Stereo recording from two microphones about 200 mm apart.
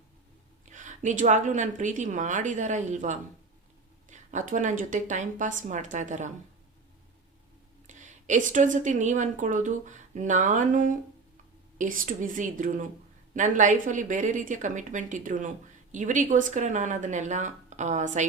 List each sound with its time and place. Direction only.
0.7 s a woman's voice: 40° right (ahead or behind)
7.9 s a woman's voice: 35° right (ahead or behind)